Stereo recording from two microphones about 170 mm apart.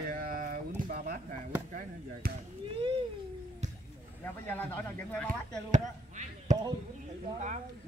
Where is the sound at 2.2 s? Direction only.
65° right (ahead or behind).